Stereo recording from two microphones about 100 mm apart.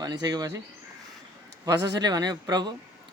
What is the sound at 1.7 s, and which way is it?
Speech, 40° right (ahead or behind).